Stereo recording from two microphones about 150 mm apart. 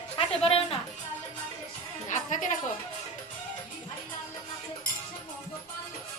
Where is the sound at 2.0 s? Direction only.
55° left (ahead or behind).